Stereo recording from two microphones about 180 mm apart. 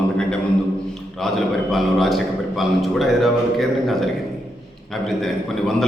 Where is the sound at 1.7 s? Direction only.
Centre (ahead or behind).